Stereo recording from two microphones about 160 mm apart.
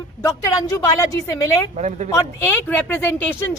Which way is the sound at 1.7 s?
45° right (ahead or behind).